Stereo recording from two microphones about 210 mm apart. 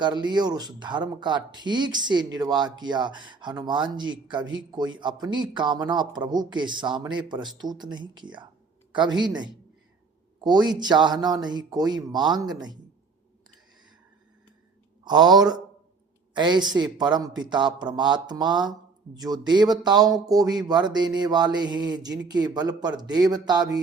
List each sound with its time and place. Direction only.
0.0 s speech: 20° right (ahead or behind)
15.0 s speech: 20° right (ahead or behind)